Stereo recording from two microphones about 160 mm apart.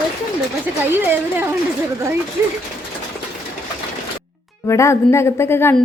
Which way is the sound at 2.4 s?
15° right (ahead or behind).